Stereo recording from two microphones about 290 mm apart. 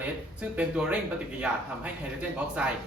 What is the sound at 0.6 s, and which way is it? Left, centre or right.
Speech, centre.